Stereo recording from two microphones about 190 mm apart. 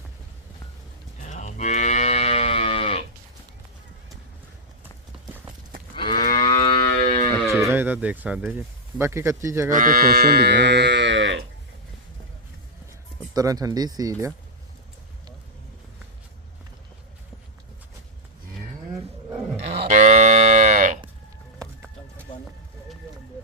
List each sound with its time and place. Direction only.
1.3 s moo: 40° left (ahead or behind)
6.0 s moo: 25° left (ahead or behind)
6.3 s livestock: 20° left (ahead or behind)
7.4 s speech: 15° right (ahead or behind)
9.6 s speech: 45° right (ahead or behind); by 11.4 s 75° right (ahead or behind)
13.3 s speech: 20° right (ahead or behind)
19.6 s a sound: 55° right (ahead or behind)
19.9 s moo: 40° right (ahead or behind)